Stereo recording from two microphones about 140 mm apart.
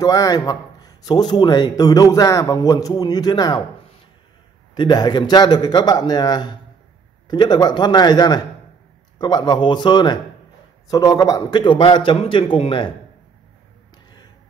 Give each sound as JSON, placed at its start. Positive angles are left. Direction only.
{"t": 0.0, "sound": "speech", "side_deg": 25}
{"t": 4.7, "sound": "speech", "side_deg": 35}
{"t": 11.5, "sound": "speech", "side_deg": 35}